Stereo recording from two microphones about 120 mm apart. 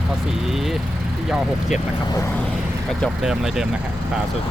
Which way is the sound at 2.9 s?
Centre (ahead or behind).